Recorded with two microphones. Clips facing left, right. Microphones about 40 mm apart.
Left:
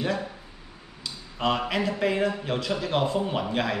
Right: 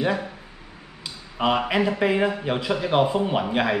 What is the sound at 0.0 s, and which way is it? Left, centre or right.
Speech, centre.